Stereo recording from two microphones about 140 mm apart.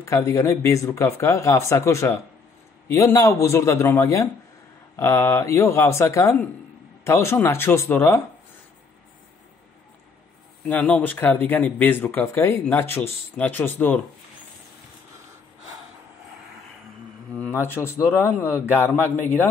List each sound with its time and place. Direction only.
0.0 s speech: 20° left (ahead or behind)
10.7 s speech: 10° left (ahead or behind)
17.4 s speech: 15° left (ahead or behind)